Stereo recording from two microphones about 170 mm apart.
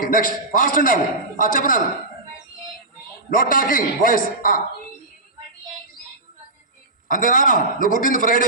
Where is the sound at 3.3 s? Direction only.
55° left (ahead or behind).